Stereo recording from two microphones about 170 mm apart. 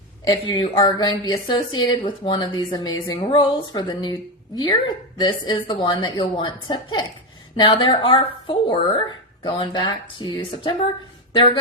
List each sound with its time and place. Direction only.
0.3 s speech: 25° left (ahead or behind)